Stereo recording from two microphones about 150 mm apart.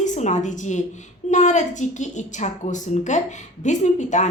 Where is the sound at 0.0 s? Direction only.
55° left (ahead or behind).